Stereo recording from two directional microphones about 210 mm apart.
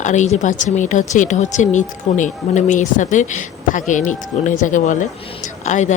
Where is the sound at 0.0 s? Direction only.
35° left (ahead or behind).